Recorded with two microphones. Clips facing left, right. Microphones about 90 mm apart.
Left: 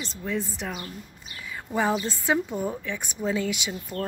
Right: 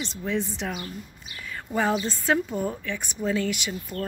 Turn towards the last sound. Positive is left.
turn(degrees=20)  # may be behind; listen again after turning